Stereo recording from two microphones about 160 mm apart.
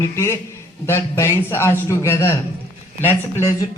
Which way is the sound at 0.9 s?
15° left (ahead or behind).